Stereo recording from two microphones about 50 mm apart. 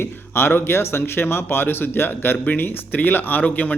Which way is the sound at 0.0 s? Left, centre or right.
Left.